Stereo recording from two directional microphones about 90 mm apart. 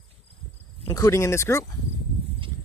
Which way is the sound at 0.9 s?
35° left (ahead or behind).